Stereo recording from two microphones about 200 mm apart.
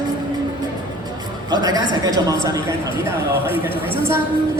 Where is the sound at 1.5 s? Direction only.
20° right (ahead or behind).